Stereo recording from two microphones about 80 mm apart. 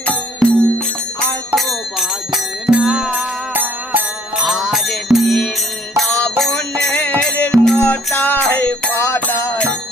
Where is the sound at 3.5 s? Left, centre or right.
Right.